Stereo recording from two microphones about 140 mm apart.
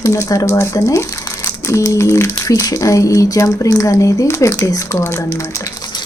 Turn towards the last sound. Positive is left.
turn(degrees=25)  # may be behind; listen again after turning